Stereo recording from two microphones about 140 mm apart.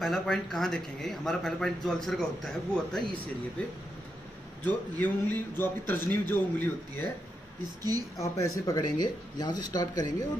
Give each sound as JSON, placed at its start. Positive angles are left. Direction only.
{"t": 0.0, "sound": "a man's voice", "side_deg": 0}
{"t": 4.6, "sound": "a man's voice", "side_deg": 15}
{"t": 8.2, "sound": "speech", "side_deg": 25}